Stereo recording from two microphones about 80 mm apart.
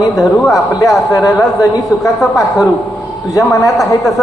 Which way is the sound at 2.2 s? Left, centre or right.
Centre.